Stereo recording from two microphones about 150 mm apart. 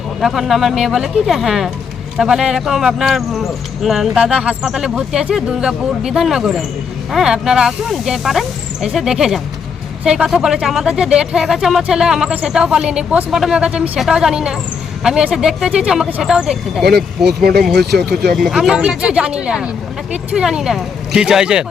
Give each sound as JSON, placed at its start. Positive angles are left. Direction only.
{"t": 0.2, "sound": "speech", "side_deg": 0}
{"t": 17.7, "sound": "speech", "side_deg": -90}
{"t": 18.3, "sound": "speech", "side_deg": 0}